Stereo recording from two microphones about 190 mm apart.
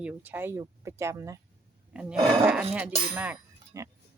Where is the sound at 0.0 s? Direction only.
10° right (ahead or behind).